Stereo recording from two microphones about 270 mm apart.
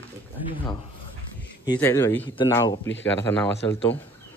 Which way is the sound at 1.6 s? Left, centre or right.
Centre.